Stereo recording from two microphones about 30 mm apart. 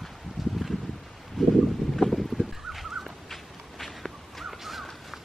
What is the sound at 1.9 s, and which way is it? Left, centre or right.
Boat, centre.